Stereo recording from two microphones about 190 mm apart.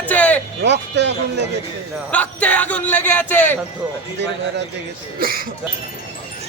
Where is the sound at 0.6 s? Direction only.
65° right (ahead or behind).